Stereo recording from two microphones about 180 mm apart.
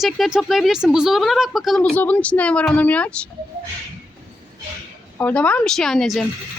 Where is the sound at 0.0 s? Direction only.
Centre (ahead or behind).